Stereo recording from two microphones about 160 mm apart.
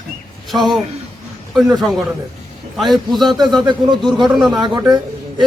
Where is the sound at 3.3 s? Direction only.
30° right (ahead or behind).